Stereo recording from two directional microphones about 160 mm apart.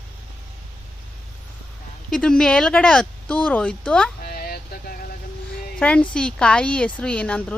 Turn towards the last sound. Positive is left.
turn(degrees=5)  # may be behind; listen again after turning